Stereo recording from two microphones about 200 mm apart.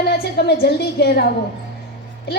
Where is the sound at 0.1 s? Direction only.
55° left (ahead or behind).